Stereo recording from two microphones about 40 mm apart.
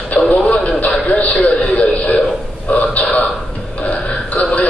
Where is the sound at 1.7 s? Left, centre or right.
Left.